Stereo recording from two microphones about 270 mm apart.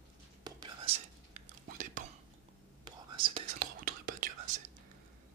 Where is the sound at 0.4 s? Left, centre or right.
Centre.